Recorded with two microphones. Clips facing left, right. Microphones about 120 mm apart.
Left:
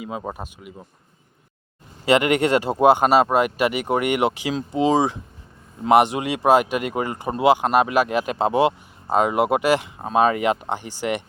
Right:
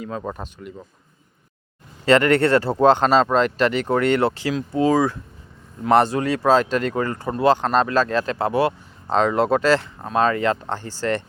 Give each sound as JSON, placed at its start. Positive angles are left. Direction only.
{"t": 0.0, "sound": "speech", "side_deg": 10}
{"t": 2.0, "sound": "speech", "side_deg": 15}